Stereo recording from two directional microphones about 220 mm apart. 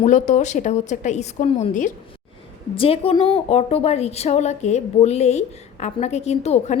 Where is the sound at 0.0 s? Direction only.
35° left (ahead or behind).